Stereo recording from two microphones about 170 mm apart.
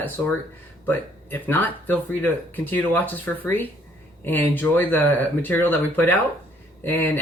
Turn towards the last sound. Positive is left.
turn(degrees=10)  # may be behind; listen again after turning